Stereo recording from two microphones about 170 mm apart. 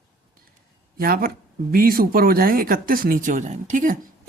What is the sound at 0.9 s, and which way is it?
Speech, 60° right (ahead or behind).